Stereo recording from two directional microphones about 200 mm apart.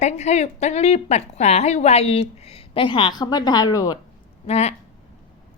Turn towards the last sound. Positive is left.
turn(degrees=30)  # may be behind; listen again after turning